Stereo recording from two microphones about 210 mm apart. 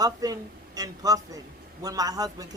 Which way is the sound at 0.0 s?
15° right (ahead or behind).